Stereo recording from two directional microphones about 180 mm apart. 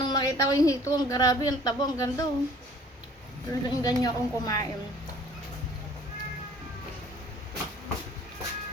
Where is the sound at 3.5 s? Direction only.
20° left (ahead or behind).